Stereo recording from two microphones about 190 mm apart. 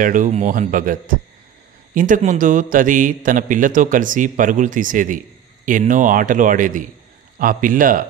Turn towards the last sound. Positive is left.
turn(degrees=-45)  # may be behind; listen again after turning